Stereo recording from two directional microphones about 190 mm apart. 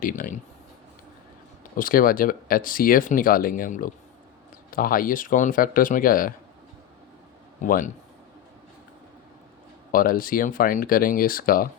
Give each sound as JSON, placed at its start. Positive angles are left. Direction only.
{"t": 0.0, "sound": "speech", "side_deg": 45}
{"t": 1.7, "sound": "speech", "side_deg": 45}
{"t": 7.6, "sound": "speech", "side_deg": 45}
{"t": 9.9, "sound": "speech", "side_deg": 50}